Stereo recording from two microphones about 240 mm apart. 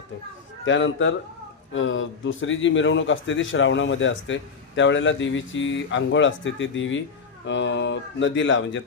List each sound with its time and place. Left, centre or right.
0.6 s a man's voice: left